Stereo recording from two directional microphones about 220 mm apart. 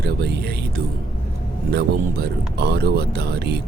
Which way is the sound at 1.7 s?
45° right (ahead or behind).